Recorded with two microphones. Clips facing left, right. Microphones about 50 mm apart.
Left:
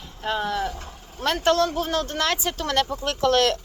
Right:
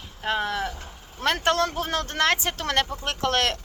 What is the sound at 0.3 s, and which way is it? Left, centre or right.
Speech, right.